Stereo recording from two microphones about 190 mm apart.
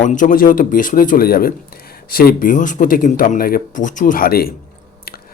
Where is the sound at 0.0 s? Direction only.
40° left (ahead or behind).